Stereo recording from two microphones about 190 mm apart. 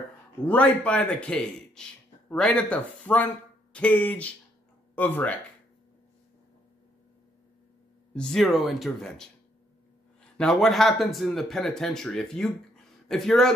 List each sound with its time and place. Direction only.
0.5 s speech: 5° left (ahead or behind)
8.1 s speech: 5° left (ahead or behind)
10.3 s speech: 5° left (ahead or behind)